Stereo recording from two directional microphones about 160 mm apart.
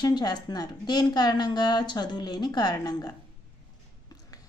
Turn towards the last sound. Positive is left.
turn(degrees=25)  # may be behind; listen again after turning